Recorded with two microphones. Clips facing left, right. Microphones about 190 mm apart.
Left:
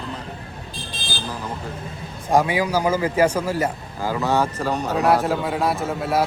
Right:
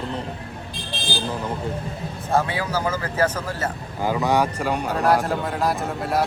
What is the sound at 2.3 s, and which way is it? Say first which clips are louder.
Speech: left 4 dB; 15° left (ahead or behind).